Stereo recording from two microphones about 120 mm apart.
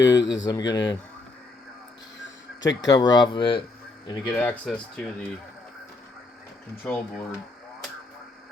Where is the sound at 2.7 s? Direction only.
30° left (ahead or behind).